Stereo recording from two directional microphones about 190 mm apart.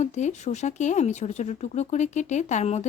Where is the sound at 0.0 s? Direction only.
40° left (ahead or behind).